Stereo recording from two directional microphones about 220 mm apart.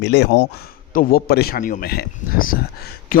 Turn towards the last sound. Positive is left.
turn(degrees=40)  # may be behind; listen again after turning